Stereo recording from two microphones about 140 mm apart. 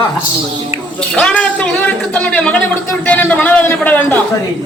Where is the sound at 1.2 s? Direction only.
10° left (ahead or behind).